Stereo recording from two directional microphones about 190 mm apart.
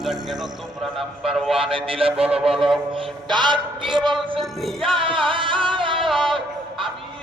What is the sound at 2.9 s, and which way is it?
Speech, 25° right (ahead or behind).